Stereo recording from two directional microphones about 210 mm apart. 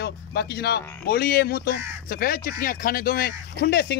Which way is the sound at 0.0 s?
50° left (ahead or behind).